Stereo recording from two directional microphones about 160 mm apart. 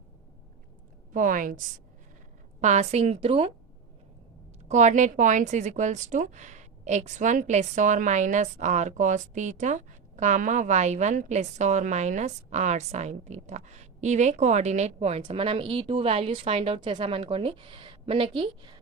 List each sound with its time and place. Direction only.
1.1 s a woman's voice: 55° right (ahead or behind)
2.6 s a woman's voice: 45° right (ahead or behind)
4.7 s a woman's voice: 50° right (ahead or behind)